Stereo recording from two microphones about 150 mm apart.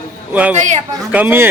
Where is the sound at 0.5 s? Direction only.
50° right (ahead or behind).